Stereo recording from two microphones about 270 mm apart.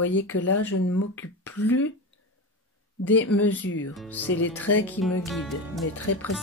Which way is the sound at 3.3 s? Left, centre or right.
Left.